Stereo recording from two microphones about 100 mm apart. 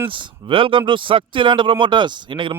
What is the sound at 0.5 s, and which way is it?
Speech, 60° right (ahead or behind).